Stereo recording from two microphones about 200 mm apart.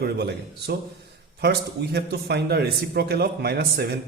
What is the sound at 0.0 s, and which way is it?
A man's voice, 55° right (ahead or behind).